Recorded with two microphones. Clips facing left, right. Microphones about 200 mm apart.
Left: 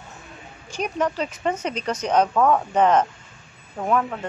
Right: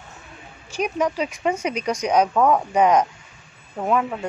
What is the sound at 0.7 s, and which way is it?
A woman's voice, 10° right (ahead or behind).